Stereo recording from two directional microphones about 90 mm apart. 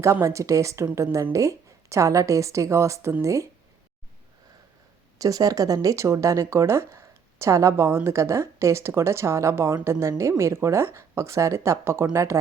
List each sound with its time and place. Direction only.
0.0 s speech: 35° right (ahead or behind)
5.1 s speech: 40° right (ahead or behind)